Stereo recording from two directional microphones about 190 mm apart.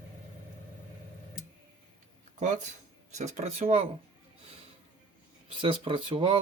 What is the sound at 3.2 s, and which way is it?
Speech, 35° right (ahead or behind).